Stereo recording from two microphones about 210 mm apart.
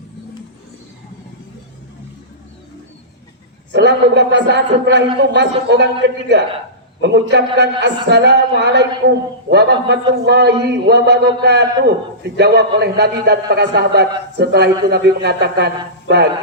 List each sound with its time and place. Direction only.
3.7 s a man's voice: 55° right (ahead or behind)